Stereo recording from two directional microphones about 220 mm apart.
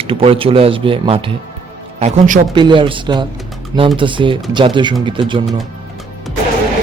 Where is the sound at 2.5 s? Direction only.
20° right (ahead or behind).